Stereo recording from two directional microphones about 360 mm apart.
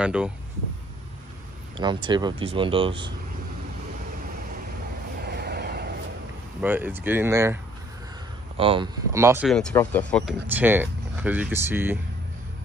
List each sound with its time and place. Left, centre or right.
0.0 s speech: centre
1.8 s speech: centre
5.2 s vehicle: right
6.6 s speech: centre
8.5 s speech: centre